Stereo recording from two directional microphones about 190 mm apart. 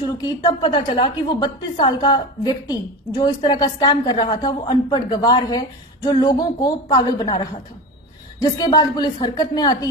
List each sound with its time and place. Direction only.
0.0 s a woman's voice: 20° left (ahead or behind)